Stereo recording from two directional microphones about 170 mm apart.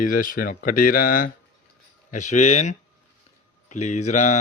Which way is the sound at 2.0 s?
45° left (ahead or behind).